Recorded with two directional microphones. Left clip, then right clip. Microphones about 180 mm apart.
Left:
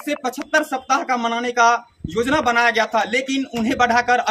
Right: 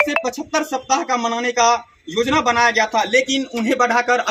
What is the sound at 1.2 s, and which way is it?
Speech, 5° left (ahead or behind).